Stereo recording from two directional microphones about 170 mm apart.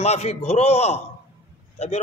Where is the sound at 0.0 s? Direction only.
40° left (ahead or behind).